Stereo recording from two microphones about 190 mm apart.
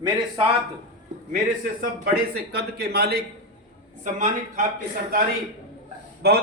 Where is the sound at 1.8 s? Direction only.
55° right (ahead or behind).